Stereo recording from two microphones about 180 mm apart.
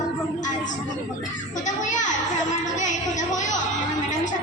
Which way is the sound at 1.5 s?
45° left (ahead or behind).